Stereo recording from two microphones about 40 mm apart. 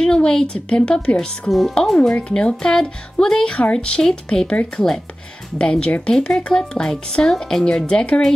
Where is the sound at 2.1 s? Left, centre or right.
Left.